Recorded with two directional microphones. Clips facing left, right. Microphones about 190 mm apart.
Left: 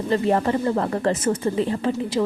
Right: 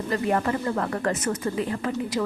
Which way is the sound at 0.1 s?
30° left (ahead or behind).